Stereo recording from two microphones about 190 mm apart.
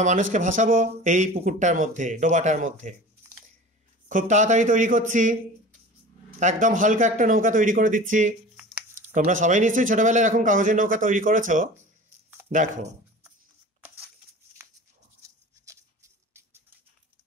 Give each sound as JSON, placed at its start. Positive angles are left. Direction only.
{"t": 0.0, "sound": "speech", "side_deg": -40}
{"t": 4.1, "sound": "speech", "side_deg": -40}
{"t": 6.4, "sound": "speech", "side_deg": -45}
{"t": 8.5, "sound": "a sound", "side_deg": -5}
{"t": 9.0, "sound": "speech", "side_deg": -40}
{"t": 15.6, "sound": "a sound", "side_deg": -15}